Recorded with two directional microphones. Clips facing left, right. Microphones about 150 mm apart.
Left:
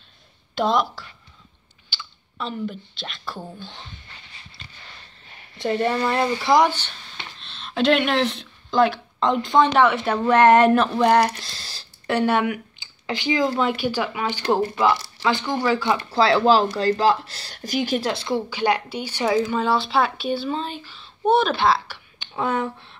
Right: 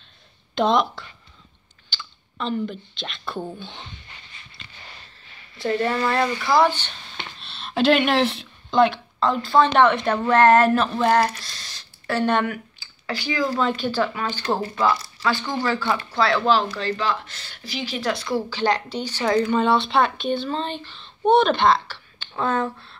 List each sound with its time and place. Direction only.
0.6 s speech: centre (ahead or behind)
1.9 s a sound: 5° left (ahead or behind)
3.4 s speech: centre (ahead or behind)
5.6 s speech: 20° left (ahead or behind)
7.3 s speech: 5° right (ahead or behind)
8.7 s speech: 5° left (ahead or behind)
9.2 s speech: 20° left (ahead or behind)
9.7 s speech: 5° left (ahead or behind)
11.3 s speech: 30° left (ahead or behind)
12.1 s speech: 10° left (ahead or behind)
16.1 s speech: 30° left (ahead or behind); by 18.0 s 50° left (ahead or behind)
18.0 s speech: 25° left (ahead or behind)
18.5 s speech: 10° left (ahead or behind)